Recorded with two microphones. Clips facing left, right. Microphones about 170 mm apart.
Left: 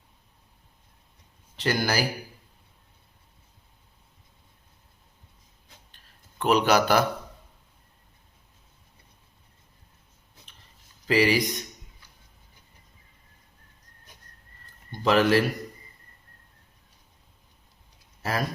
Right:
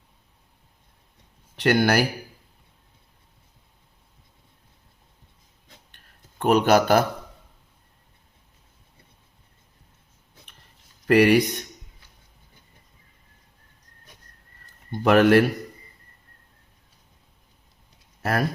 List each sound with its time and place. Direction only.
1.5 s speech: 65° right (ahead or behind)
6.4 s a man's voice: 50° right (ahead or behind)
11.0 s speech: 60° right (ahead or behind)
15.0 s speech: 60° right (ahead or behind)
18.2 s a sound: 60° right (ahead or behind)